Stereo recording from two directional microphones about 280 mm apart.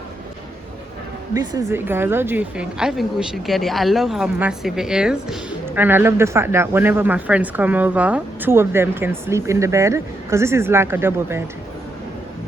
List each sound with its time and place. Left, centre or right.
1.3 s a woman's voice: centre